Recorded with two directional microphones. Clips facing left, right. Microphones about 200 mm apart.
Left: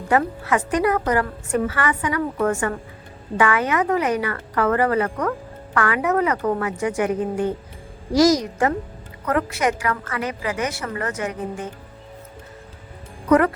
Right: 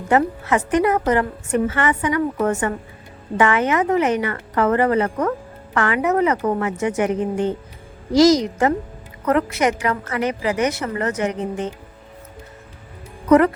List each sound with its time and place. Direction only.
0.1 s a woman's voice: 25° right (ahead or behind)